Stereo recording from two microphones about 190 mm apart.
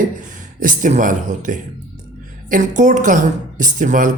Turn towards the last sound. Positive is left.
turn(degrees=-45)  # may be behind; listen again after turning